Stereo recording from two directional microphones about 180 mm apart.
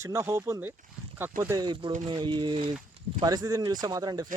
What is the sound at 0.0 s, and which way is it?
Speech, 15° right (ahead or behind).